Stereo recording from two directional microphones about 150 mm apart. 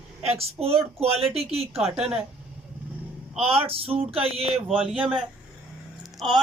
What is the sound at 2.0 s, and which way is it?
Speech, 5° right (ahead or behind).